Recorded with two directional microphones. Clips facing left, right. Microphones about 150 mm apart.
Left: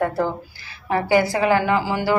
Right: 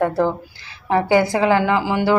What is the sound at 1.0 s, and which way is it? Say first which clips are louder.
A woman's voice: right 1 dB; 20° right (ahead or behind).